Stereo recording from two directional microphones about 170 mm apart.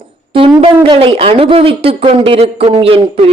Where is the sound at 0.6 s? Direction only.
35° right (ahead or behind).